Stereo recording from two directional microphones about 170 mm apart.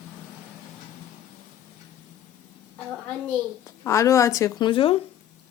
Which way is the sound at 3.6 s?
20° left (ahead or behind).